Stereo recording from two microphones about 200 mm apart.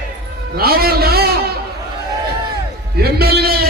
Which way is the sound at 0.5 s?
50° right (ahead or behind).